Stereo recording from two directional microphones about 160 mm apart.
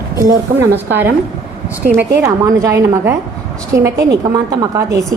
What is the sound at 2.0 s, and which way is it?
A woman's voice, 20° right (ahead or behind).